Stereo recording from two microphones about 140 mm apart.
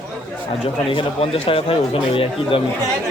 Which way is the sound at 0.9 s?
45° left (ahead or behind).